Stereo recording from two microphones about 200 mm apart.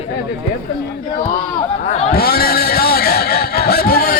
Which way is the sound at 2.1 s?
50° left (ahead or behind).